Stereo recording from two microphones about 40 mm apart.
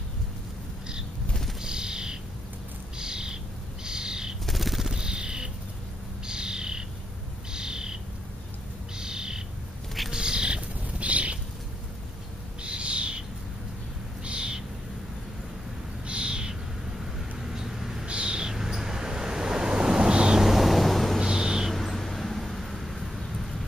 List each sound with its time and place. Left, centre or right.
1.6 s bird: centre
3.8 s owl: centre
4.5 s a sound: centre
4.9 s bird: right
12.6 s owl: right
14.2 s owl: right
16.1 s owl: right
17.0 s vehicle: centre
18.0 s owl: right
18.5 s waves: centre
20.3 s a sound: centre
21.2 s owl: centre
21.6 s a sound: centre